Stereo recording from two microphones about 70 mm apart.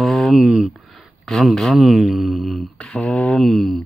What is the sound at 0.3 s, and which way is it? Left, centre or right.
Speech, centre.